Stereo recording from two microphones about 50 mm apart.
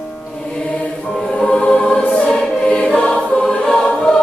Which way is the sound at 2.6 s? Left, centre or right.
Left.